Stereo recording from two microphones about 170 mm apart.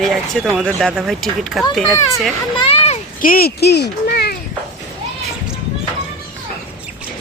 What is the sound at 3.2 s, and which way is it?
Speech, 60° left (ahead or behind).